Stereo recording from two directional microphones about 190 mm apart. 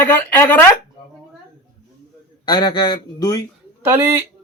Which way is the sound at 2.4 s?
20° left (ahead or behind).